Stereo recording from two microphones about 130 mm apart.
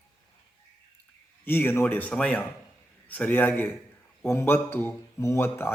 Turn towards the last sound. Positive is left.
turn(degrees=20)  # may be behind; listen again after turning